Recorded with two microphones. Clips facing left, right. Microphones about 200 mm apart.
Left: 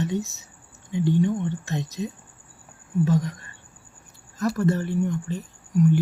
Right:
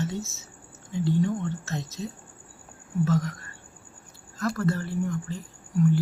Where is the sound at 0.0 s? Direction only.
15° left (ahead or behind).